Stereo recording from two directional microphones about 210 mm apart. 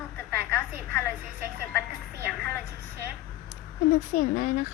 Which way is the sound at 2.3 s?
10° left (ahead or behind).